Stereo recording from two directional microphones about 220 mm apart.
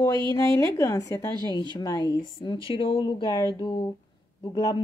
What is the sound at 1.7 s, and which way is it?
Speech, 15° left (ahead or behind).